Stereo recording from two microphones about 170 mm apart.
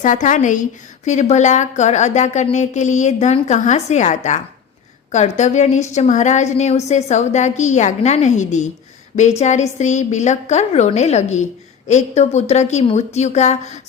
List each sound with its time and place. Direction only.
0.0 s a woman's voice: 50° left (ahead or behind)